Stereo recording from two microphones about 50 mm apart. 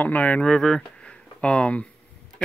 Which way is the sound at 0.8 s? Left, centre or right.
Left.